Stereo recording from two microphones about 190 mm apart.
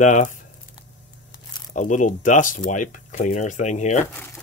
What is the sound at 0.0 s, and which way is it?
Speech, 40° left (ahead or behind).